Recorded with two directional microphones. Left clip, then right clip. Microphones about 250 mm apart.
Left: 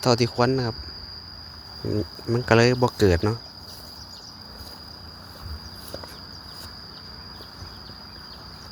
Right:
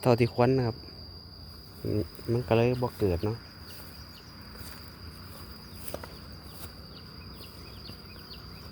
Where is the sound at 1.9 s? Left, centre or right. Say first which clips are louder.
Left 4 dB; centre.